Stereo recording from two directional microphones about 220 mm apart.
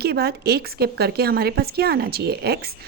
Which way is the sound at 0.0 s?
45° right (ahead or behind).